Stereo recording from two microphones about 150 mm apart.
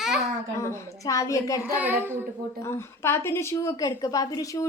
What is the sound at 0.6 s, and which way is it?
A child's voice, 20° left (ahead or behind).